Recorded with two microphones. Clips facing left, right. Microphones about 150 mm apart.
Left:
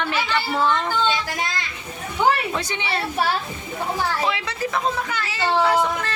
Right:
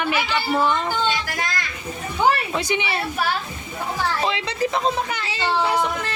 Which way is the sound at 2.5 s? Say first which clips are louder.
Right 3 dB; 15° right (ahead or behind).